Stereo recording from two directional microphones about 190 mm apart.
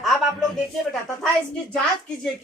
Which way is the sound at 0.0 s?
Centre (ahead or behind).